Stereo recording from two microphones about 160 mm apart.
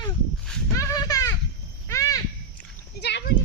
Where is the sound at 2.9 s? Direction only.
90° left.